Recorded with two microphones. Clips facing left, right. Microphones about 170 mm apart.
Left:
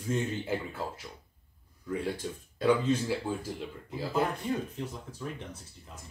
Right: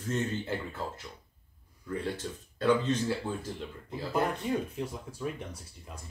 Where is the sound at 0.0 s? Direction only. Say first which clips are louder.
Left 1 dB; 10° left (ahead or behind).